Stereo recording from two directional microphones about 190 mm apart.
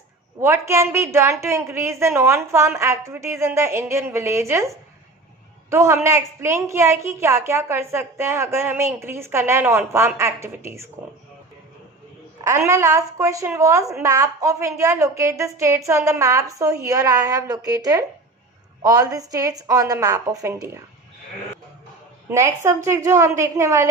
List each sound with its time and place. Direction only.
0.3 s a woman's voice: 15° right (ahead or behind)
5.7 s a woman's voice: 15° right (ahead or behind)
12.4 s a woman's voice: 15° right (ahead or behind)
22.3 s a woman's voice: 15° right (ahead or behind)